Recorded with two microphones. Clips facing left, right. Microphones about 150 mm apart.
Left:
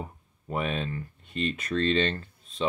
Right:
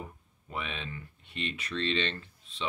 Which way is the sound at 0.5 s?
45° left (ahead or behind).